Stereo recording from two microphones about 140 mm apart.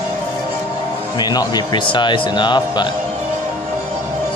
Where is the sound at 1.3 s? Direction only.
30° left (ahead or behind).